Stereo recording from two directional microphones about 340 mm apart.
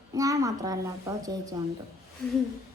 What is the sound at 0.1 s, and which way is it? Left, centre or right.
A child's voice, centre.